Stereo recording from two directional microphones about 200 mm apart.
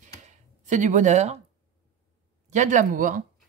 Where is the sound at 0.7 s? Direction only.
40° right (ahead or behind).